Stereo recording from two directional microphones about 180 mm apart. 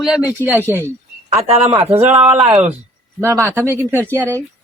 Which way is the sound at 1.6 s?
15° right (ahead or behind).